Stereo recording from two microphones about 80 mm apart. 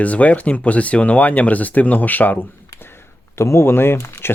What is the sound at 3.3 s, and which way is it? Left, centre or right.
Speech, left.